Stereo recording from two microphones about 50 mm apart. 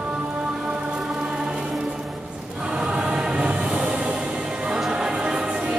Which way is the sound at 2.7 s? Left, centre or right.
Centre.